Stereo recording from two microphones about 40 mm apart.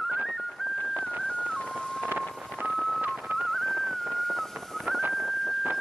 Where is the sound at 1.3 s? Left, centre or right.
Left.